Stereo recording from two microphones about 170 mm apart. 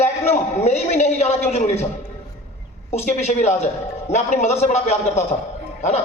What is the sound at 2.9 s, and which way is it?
A man's voice, 40° left (ahead or behind).